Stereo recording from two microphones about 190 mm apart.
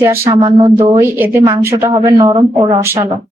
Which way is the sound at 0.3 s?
25° right (ahead or behind).